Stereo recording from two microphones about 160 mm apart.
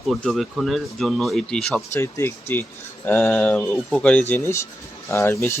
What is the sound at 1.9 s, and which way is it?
Speech, 15° left (ahead or behind).